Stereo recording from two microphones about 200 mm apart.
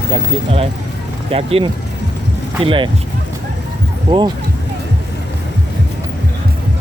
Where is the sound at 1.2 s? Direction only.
30° right (ahead or behind).